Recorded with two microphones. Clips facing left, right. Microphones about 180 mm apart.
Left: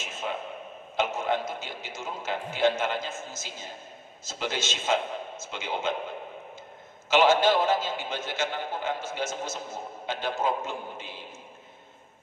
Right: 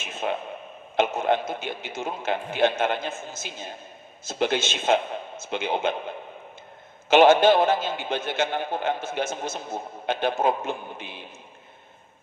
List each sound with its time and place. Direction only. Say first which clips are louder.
0.0 s a sound: right 5 dB; 60° right (ahead or behind)
0.9 s a man's voice: right 5 dB; 60° right (ahead or behind)
7.1 s a man's voice: right 5 dB; 60° right (ahead or behind)